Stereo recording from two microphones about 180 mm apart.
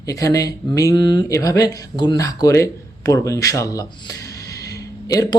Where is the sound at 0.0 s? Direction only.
20° left (ahead or behind).